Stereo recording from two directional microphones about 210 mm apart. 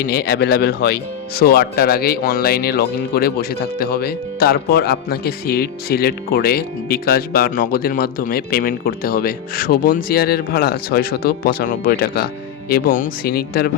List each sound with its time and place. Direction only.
0.1 s speech: 50° left (ahead or behind)